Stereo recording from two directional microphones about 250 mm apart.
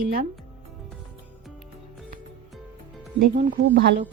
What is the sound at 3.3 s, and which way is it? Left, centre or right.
Speech, right.